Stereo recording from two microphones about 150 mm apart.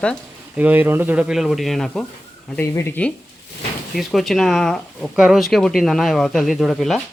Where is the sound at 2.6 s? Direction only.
15° left (ahead or behind).